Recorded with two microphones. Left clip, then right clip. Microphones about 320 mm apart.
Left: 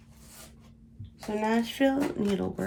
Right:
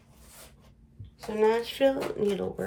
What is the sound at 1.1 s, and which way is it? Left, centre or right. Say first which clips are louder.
Speech: right 4 dB; centre.